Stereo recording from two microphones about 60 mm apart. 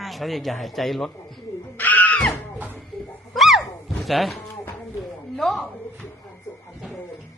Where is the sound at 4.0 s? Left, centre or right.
Centre.